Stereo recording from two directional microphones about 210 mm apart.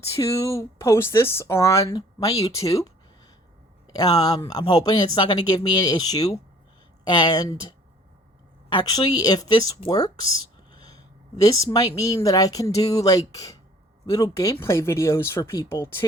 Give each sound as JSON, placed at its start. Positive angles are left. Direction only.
{"t": 0.2, "sound": "speech", "side_deg": 15}